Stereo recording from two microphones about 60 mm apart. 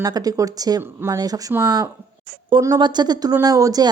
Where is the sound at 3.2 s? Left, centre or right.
Right.